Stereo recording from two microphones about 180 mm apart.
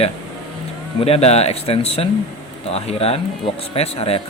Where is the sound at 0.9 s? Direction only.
35° left (ahead or behind).